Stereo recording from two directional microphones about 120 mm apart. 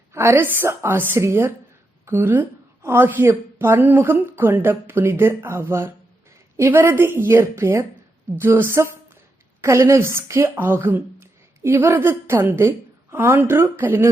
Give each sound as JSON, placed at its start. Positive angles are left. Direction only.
{"t": 0.1, "sound": "a woman's voice", "side_deg": -20}